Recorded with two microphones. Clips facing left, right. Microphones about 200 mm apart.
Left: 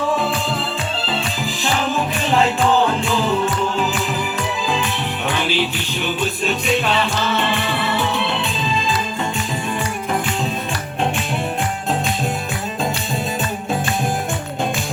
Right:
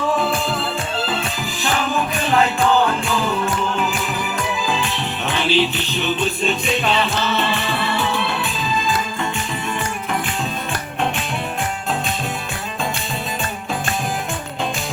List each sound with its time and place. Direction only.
5.5 s music: 10° left (ahead or behind)
7.9 s music: 20° left (ahead or behind)